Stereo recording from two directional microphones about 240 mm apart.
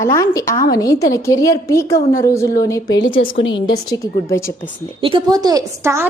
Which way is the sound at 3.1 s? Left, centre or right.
Left.